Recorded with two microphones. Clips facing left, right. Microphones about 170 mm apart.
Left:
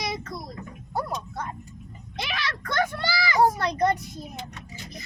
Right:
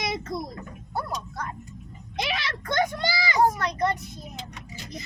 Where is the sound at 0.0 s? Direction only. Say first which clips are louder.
Right 2 dB; 25° right (ahead or behind).